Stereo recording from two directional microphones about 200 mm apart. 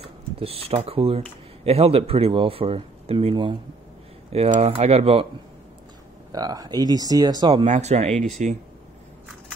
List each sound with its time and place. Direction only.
0.0 s speech: 30° right (ahead or behind)
6.3 s speech: 20° right (ahead or behind)
7.6 s speech: 35° right (ahead or behind)